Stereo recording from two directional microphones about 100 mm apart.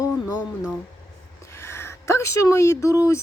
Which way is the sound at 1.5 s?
25° left (ahead or behind).